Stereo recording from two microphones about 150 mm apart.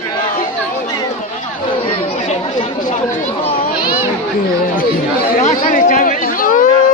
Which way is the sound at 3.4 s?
35° left (ahead or behind).